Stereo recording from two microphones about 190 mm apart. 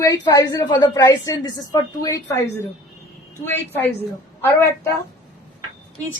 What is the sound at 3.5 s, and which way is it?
Speech, 10° left (ahead or behind).